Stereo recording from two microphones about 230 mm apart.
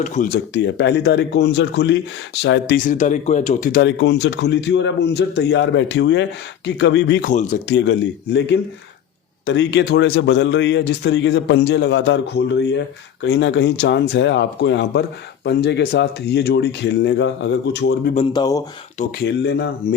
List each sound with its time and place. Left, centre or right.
0.0 s speech: left
0.5 s speech: left
7.3 s speech: left
7.7 s speech: left
18.1 s speech: left
19.2 s speech: left